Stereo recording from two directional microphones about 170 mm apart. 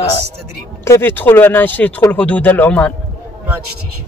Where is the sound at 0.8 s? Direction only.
15° left (ahead or behind).